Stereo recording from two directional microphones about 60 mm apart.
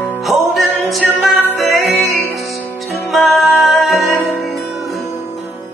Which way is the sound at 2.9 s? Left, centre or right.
Centre.